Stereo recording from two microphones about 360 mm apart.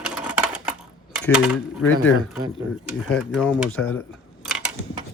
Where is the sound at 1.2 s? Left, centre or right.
Centre.